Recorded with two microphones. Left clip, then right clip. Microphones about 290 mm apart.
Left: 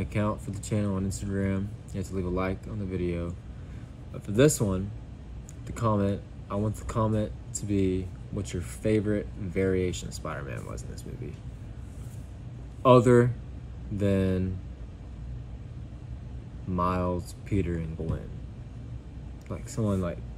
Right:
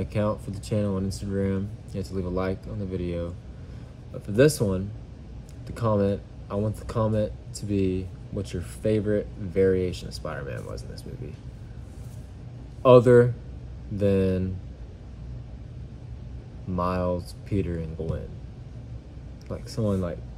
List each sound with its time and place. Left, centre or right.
0.0 s speech: centre
4.3 s speech: centre
12.8 s speech: centre
16.7 s speech: centre
19.5 s speech: centre